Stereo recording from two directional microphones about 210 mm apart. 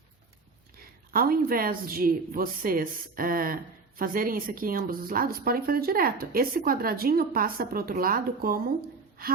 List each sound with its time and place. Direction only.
1.1 s a woman's voice: 45° right (ahead or behind)